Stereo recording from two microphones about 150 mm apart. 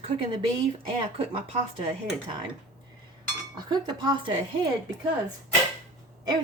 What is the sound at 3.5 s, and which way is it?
Speech, 30° right (ahead or behind).